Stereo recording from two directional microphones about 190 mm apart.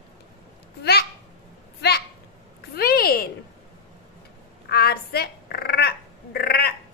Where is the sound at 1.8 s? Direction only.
55° left (ahead or behind).